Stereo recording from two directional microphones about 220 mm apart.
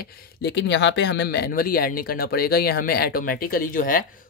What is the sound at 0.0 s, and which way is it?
Speech, 50° left (ahead or behind).